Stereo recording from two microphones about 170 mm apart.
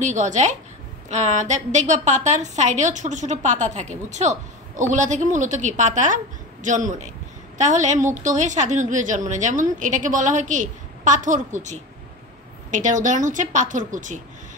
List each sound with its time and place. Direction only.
0.0 s a woman's voice: 45° right (ahead or behind)